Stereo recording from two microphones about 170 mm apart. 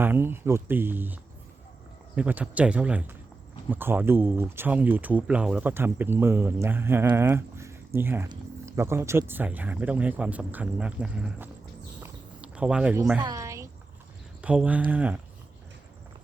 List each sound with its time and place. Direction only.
0.0 s speech: 10° right (ahead or behind)
12.0 s cricket: 5° right (ahead or behind)
13.1 s a woman's voice: 20° right (ahead or behind)